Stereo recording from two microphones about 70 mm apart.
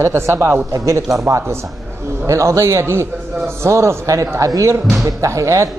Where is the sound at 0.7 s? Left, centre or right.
Right.